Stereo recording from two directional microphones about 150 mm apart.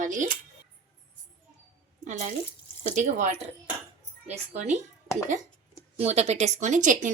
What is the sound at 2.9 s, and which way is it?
A woman's voice, 55° right (ahead or behind).